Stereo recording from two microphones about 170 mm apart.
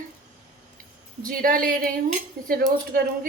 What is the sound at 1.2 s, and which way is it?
Speech, 55° right (ahead or behind).